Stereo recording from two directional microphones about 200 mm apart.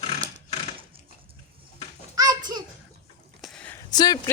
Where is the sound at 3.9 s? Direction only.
20° left (ahead or behind).